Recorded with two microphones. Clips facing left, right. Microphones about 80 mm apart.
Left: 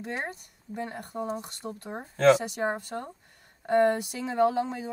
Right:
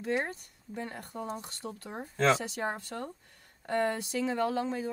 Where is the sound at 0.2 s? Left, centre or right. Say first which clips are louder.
Even; centre.